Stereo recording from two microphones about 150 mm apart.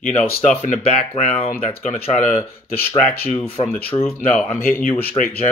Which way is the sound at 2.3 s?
15° left (ahead or behind).